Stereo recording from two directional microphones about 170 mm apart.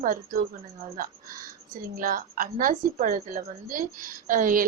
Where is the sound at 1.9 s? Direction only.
55° right (ahead or behind).